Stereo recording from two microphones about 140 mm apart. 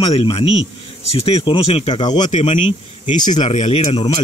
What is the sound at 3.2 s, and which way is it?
Speech, 30° left (ahead or behind).